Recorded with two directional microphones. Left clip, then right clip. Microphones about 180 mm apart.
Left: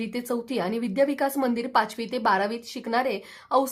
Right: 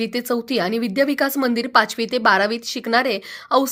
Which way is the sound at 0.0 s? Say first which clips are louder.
Right 7 dB; 10° right (ahead or behind).